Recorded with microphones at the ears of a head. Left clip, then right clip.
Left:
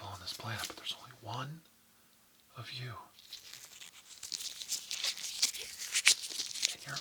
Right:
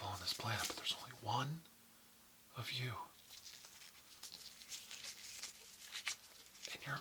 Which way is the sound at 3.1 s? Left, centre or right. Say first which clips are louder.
Left 7 dB; left.